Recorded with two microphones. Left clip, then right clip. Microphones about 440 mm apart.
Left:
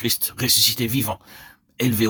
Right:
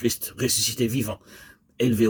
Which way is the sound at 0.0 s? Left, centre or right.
Left.